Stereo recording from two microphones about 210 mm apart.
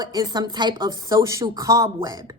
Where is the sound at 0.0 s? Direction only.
20° right (ahead or behind).